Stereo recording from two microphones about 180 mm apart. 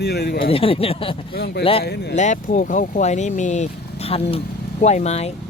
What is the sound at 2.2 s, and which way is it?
Speech, 45° left (ahead or behind).